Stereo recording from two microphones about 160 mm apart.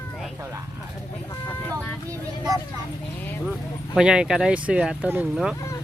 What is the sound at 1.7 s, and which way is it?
Speech, 20° right (ahead or behind).